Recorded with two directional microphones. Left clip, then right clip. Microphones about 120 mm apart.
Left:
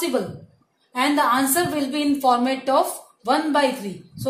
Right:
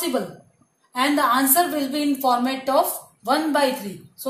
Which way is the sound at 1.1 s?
70° left (ahead or behind).